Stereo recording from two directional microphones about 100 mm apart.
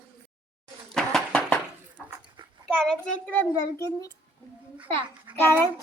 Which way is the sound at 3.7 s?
30° left (ahead or behind).